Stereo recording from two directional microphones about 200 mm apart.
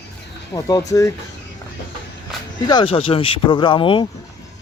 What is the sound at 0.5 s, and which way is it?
Speech, 15° left (ahead or behind).